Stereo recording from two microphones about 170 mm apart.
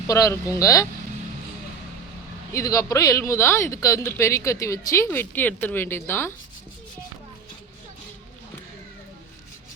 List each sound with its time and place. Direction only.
0.1 s speech: 20° left (ahead or behind)
2.5 s speech: 20° left (ahead or behind)